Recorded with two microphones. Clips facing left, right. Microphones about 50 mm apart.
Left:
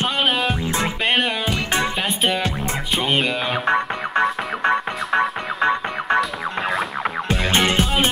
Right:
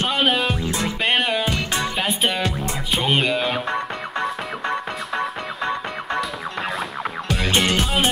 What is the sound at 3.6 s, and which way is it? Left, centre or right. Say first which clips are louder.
Music: left 5 dB; left.